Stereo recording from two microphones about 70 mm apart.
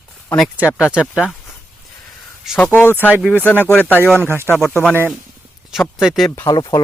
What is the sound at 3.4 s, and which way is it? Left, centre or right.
Speech, left.